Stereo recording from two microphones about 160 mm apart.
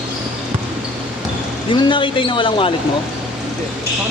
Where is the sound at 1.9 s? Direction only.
30° left (ahead or behind).